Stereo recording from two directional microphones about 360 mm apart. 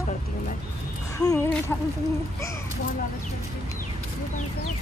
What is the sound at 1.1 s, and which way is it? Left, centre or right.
Speech, centre.